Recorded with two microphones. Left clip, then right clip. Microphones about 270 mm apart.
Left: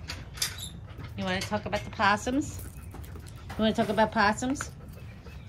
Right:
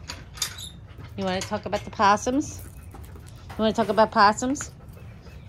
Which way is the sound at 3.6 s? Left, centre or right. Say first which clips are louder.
Right 5 dB; centre.